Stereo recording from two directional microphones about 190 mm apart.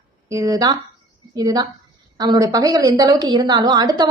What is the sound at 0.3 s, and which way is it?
A woman's voice, 15° right (ahead or behind).